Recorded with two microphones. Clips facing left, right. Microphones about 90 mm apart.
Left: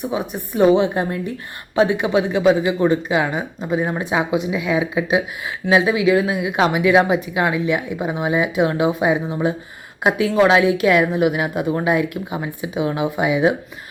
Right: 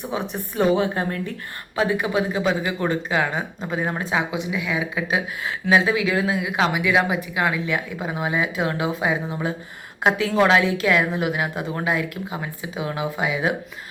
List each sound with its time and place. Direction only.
0.0 s speech: 10° left (ahead or behind)